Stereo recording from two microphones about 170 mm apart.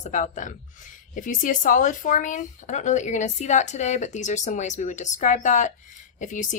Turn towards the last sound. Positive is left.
turn(degrees=50)  # may be behind; listen again after turning